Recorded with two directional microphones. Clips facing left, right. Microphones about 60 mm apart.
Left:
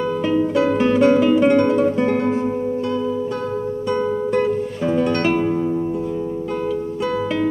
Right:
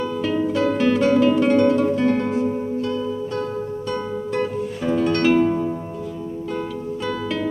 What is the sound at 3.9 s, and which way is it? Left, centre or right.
Music, centre.